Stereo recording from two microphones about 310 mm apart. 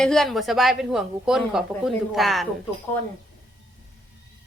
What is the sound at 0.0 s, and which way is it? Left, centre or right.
Speech, centre.